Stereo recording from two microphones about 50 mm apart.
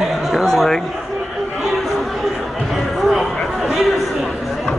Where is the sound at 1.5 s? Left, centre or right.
Centre.